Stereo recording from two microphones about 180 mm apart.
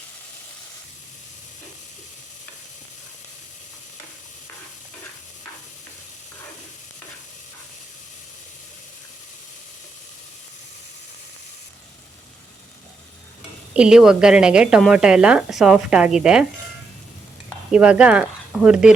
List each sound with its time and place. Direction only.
13.7 s a woman's voice: 5° right (ahead or behind)
17.7 s speech: 5° right (ahead or behind)